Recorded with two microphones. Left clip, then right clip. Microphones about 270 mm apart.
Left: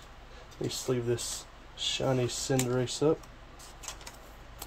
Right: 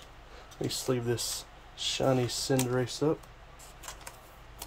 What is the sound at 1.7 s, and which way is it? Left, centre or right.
Speech, centre.